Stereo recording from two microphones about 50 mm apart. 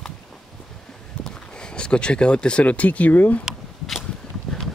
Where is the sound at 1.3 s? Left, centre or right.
Centre; by 3.4 s left.